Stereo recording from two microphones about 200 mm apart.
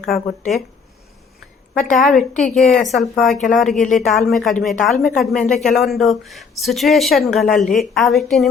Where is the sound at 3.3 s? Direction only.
40° left (ahead or behind).